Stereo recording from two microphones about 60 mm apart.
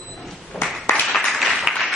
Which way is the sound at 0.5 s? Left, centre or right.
Centre.